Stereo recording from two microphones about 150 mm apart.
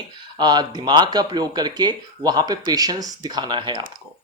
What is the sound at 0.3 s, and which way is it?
Speech, 30° right (ahead or behind).